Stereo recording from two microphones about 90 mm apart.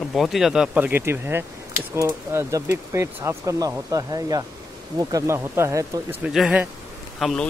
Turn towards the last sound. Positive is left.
turn(degrees=0)  # may be behind; listen again after turning